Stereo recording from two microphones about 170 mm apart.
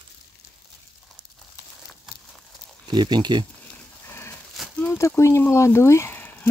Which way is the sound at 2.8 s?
25° right (ahead or behind).